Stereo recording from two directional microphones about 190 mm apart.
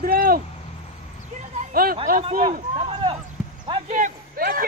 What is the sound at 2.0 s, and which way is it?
Speech, 40° right (ahead or behind).